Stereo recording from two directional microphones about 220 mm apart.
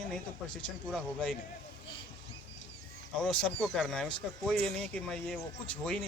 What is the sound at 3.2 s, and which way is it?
A man's voice, 5° left (ahead or behind).